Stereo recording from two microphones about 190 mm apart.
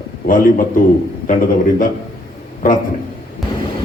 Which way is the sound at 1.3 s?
45° left (ahead or behind).